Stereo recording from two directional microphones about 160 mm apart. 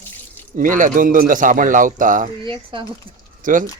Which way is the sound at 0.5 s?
55° right (ahead or behind).